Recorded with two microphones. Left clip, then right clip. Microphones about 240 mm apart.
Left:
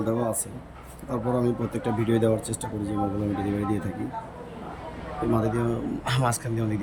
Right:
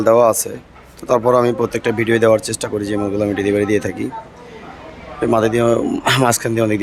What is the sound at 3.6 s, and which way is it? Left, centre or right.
Speech, right.